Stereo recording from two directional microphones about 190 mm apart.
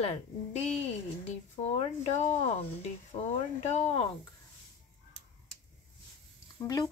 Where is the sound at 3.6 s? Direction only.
35° left (ahead or behind).